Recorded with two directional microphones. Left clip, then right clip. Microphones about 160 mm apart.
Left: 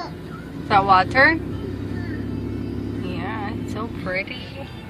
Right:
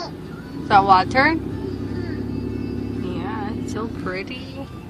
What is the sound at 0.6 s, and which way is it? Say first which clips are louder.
Speech: right 2 dB; 20° right (ahead or behind).